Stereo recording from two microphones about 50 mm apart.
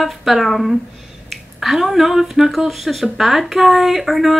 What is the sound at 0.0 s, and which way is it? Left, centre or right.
Speech, centre.